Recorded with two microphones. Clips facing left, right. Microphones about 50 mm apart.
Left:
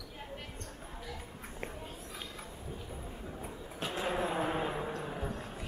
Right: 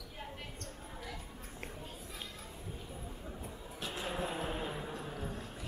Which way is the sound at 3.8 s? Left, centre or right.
Left.